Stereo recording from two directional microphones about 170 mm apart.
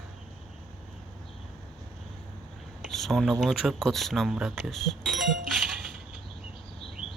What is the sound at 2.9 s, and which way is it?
Speech, centre (ahead or behind).